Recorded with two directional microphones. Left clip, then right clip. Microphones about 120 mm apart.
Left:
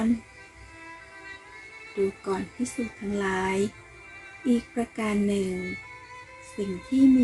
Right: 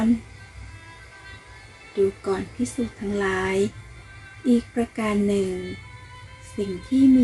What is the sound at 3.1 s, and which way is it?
Speech, 5° left (ahead or behind).